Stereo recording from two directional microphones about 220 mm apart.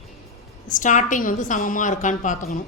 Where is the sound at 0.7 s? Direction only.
35° left (ahead or behind).